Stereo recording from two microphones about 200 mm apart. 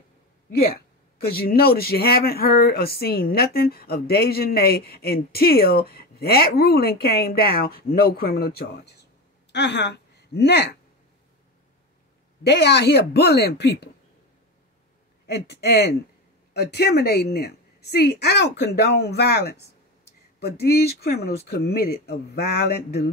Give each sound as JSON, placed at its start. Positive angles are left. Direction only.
{"t": 1.2, "sound": "a woman's voice", "side_deg": 50}
{"t": 12.4, "sound": "a woman's voice", "side_deg": 55}
{"t": 15.2, "sound": "a woman's voice", "side_deg": 55}